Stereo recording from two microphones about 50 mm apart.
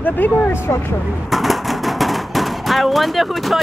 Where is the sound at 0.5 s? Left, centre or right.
Left.